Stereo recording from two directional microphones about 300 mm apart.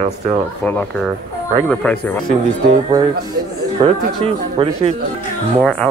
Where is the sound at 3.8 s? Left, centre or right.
Centre.